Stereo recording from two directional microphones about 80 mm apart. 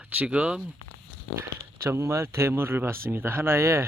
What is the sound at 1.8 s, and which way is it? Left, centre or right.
Speech, right.